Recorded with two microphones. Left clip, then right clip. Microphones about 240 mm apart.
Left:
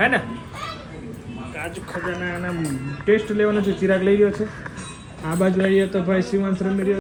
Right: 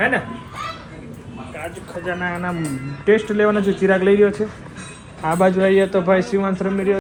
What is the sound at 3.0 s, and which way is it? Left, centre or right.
Speech, centre.